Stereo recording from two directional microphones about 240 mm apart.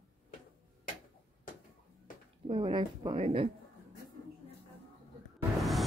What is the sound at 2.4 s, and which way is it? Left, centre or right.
Speech, right.